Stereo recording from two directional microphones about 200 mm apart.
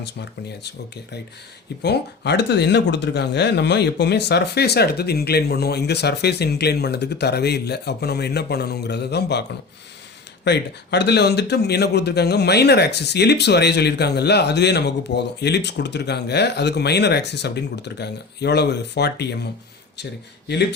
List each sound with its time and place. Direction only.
1.8 s a man's voice: 55° left (ahead or behind)
10.4 s a man's voice: 60° left (ahead or behind)